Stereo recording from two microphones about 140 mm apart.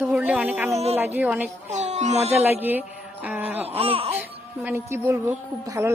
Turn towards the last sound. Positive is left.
turn(degrees=-20)  # may be behind; listen again after turning